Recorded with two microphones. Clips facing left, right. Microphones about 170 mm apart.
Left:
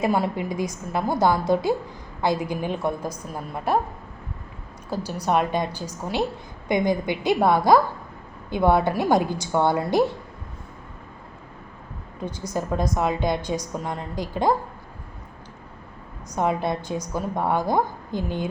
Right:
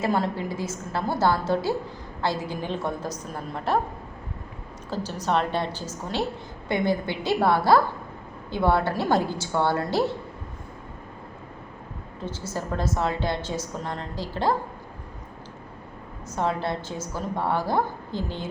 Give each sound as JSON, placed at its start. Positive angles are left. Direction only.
{"t": 0.0, "sound": "a woman's voice", "side_deg": 15}
{"t": 4.9, "sound": "a woman's voice", "side_deg": 10}
{"t": 12.2, "sound": "a woman's voice", "side_deg": 15}
{"t": 16.3, "sound": "a woman's voice", "side_deg": 15}